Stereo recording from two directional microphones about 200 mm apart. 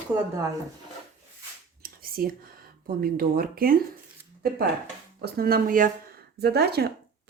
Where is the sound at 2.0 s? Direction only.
45° right (ahead or behind).